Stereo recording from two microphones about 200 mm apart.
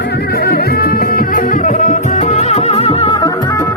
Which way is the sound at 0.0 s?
55° left (ahead or behind).